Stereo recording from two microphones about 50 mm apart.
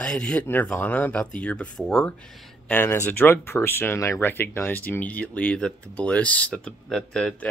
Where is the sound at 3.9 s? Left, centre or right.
Left.